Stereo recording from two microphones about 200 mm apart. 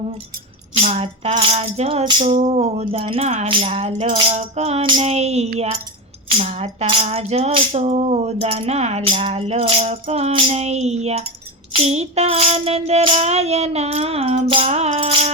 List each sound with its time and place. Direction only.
0.7 s music: 30° right (ahead or behind)